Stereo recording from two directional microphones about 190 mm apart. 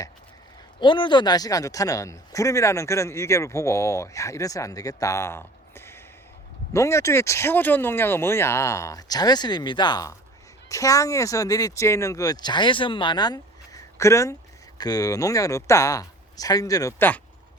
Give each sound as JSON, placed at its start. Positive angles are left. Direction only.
{"t": 0.8, "sound": "speech", "side_deg": 25}